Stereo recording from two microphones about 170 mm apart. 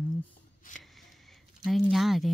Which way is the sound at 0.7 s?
50° left (ahead or behind).